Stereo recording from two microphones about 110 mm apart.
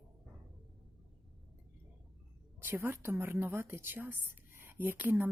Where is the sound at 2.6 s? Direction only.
20° right (ahead or behind).